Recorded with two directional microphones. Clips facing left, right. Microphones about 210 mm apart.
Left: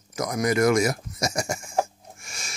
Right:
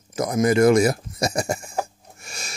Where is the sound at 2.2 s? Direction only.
35° right (ahead or behind).